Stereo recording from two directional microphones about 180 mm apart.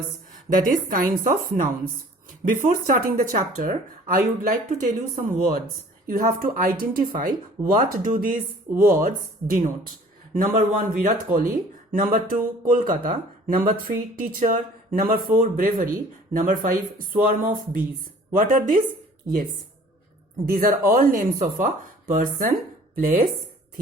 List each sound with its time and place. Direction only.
0.6 s speech: 50° right (ahead or behind)
20.4 s speech: 50° right (ahead or behind)